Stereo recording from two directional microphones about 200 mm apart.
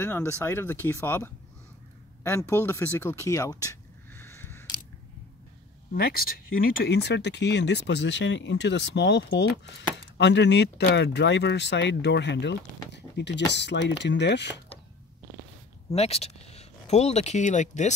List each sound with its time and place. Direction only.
0.0 s speech: 10° left (ahead or behind)
5.9 s speech: 50° left (ahead or behind)
15.9 s speech: 30° left (ahead or behind)